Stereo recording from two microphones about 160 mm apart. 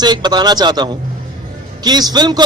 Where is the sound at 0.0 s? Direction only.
25° right (ahead or behind).